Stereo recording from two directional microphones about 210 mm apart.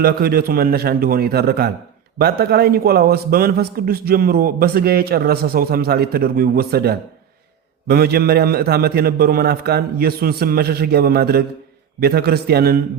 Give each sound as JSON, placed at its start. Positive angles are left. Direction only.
{"t": 0.0, "sound": "a man's voice", "side_deg": -45}